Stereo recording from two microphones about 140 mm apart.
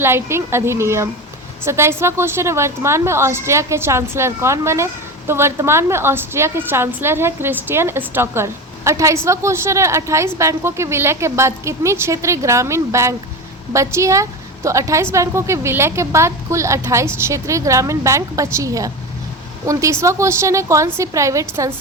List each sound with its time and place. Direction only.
0.0 s a woman's voice: 15° right (ahead or behind)